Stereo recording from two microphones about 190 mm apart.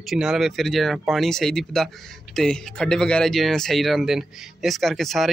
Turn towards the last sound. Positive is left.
turn(degrees=0)  # may be behind; listen again after turning